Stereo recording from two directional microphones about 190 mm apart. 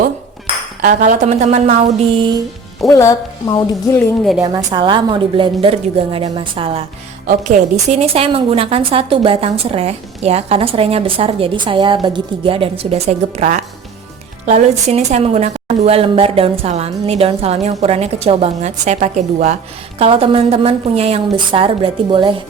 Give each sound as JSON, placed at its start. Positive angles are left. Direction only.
{"t": 0.8, "sound": "a woman's voice", "side_deg": -45}
{"t": 2.9, "sound": "a woman's voice", "side_deg": 15}
{"t": 4.5, "sound": "a woman's voice", "side_deg": -25}
{"t": 7.3, "sound": "a woman's voice", "side_deg": -40}
{"t": 20.0, "sound": "a woman's voice", "side_deg": -30}